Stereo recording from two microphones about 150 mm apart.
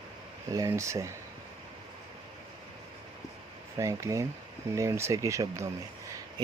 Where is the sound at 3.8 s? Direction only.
20° right (ahead or behind).